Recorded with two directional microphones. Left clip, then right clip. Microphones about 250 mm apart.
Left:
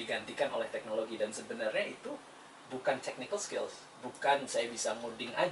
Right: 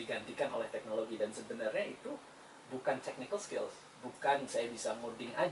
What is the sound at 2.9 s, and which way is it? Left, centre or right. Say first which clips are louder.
Speech: left 3 dB; centre.